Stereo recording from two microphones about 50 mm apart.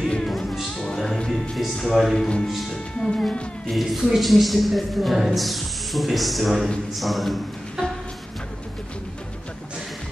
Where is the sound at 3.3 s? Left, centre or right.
Left.